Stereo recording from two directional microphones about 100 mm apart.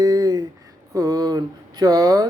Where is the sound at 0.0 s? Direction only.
40° right (ahead or behind).